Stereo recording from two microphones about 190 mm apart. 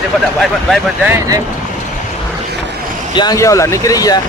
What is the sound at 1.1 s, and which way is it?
Speech, 15° right (ahead or behind).